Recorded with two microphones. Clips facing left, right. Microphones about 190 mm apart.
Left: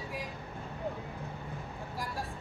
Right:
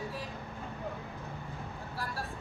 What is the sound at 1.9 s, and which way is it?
Vehicle, 15° left (ahead or behind).